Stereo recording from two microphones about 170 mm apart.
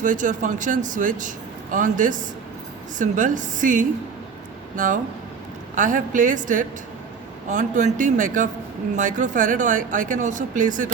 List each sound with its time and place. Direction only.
0.0 s speech: 50° right (ahead or behind)
5.7 s speech: 50° right (ahead or behind)